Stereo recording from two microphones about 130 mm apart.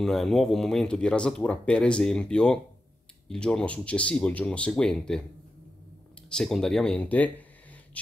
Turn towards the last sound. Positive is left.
turn(degrees=10)  # may be behind; listen again after turning